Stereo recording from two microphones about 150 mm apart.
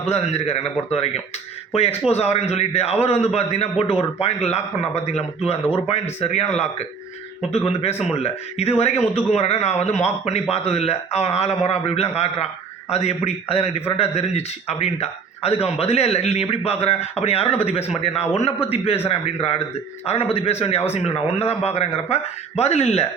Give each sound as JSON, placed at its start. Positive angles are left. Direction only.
{"t": 0.0, "sound": "a man's voice", "side_deg": 45}